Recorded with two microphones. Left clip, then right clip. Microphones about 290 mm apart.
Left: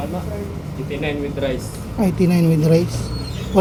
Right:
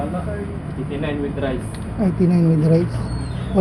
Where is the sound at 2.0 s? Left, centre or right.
Left.